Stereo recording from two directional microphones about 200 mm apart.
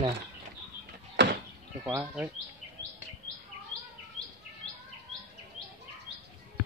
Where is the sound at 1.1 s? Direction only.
60° right (ahead or behind).